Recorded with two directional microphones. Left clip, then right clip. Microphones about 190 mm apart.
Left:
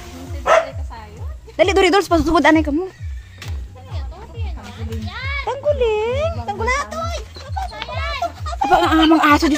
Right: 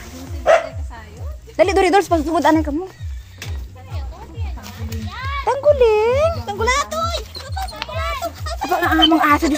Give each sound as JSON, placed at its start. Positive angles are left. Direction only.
{"t": 1.6, "sound": "speech", "side_deg": 0}
{"t": 2.2, "sound": "speech", "side_deg": 20}
{"t": 5.4, "sound": "music", "side_deg": -20}
{"t": 6.4, "sound": "music", "side_deg": -5}
{"t": 7.9, "sound": "music", "side_deg": 10}
{"t": 8.5, "sound": "speech", "side_deg": 20}